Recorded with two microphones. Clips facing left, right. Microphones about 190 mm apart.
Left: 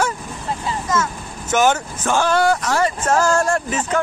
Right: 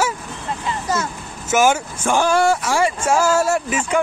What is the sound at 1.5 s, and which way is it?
Speech, 10° right (ahead or behind).